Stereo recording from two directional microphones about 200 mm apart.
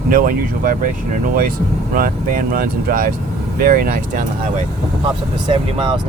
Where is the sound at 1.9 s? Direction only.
45° right (ahead or behind).